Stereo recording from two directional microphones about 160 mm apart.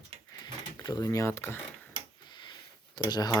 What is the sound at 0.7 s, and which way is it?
Speech, 25° left (ahead or behind).